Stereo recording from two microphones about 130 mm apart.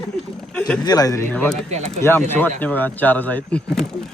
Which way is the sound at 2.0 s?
15° left (ahead or behind).